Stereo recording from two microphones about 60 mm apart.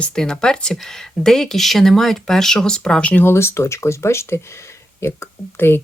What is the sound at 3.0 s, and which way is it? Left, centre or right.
Speech, left.